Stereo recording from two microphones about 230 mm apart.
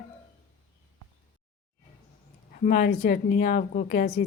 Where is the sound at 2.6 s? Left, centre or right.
Left.